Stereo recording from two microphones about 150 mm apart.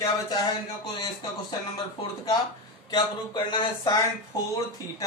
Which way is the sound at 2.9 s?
30° left (ahead or behind).